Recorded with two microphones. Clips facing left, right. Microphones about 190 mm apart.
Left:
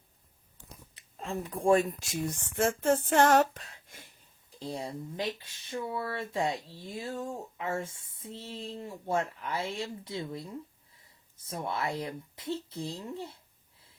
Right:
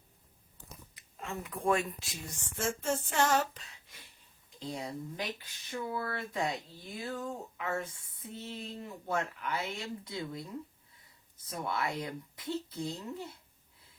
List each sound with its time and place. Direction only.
0.9 s speech: 30° left (ahead or behind); by 4.1 s 50° left (ahead or behind)
4.6 s speech: 30° left (ahead or behind)